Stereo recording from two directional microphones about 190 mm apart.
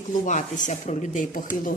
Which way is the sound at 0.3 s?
40° left (ahead or behind).